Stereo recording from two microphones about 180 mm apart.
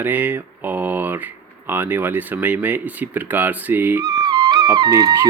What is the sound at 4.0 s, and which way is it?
Speech, 25° right (ahead or behind).